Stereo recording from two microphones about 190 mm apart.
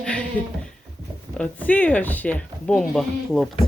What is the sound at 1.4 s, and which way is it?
Speech, 10° left (ahead or behind).